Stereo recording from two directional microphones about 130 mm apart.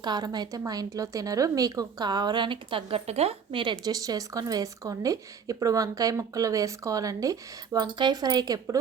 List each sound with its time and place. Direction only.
0.0 s a woman's voice: 35° right (ahead or behind)